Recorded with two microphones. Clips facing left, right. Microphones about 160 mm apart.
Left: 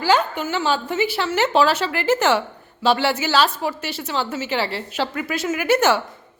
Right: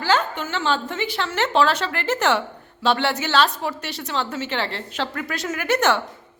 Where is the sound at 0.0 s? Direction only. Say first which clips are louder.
Left 3 dB; 10° left (ahead or behind).